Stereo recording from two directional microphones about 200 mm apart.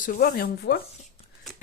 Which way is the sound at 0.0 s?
45° left (ahead or behind).